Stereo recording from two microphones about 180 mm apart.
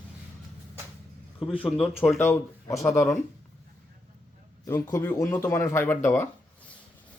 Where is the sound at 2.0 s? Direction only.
15° left (ahead or behind).